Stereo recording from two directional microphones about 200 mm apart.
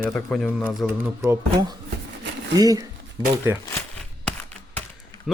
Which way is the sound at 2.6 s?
20° right (ahead or behind).